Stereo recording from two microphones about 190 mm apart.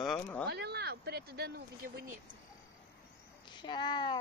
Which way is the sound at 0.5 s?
60° right (ahead or behind).